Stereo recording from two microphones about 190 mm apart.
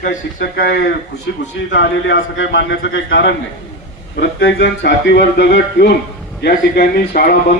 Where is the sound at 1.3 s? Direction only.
70° left (ahead or behind).